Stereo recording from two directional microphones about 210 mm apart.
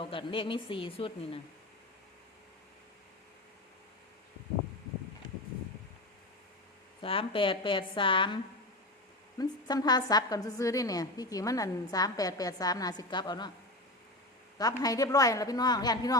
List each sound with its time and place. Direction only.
0.0 s speech: 25° left (ahead or behind)
7.0 s speech: 25° left (ahead or behind)
9.4 s a woman's voice: 20° left (ahead or behind)
14.6 s a woman's voice: 15° left (ahead or behind)